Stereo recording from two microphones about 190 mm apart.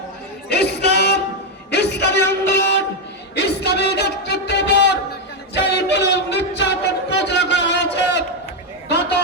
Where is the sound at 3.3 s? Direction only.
60° left (ahead or behind).